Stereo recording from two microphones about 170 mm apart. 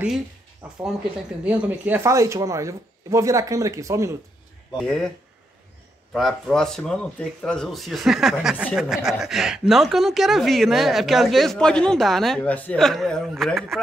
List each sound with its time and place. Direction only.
1.4 s speech: 5° right (ahead or behind)
4.8 s a woman's voice: 5° left (ahead or behind)
6.1 s a woman's voice: centre (ahead or behind)